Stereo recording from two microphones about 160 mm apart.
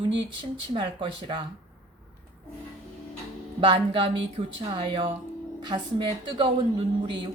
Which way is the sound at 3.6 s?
30° right (ahead or behind).